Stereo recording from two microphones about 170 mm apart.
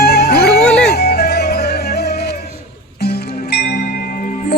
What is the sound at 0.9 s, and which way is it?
Music, 70° left (ahead or behind).